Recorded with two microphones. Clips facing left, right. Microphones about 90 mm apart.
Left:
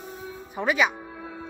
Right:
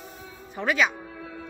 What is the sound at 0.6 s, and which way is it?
Speech, 15° left (ahead or behind).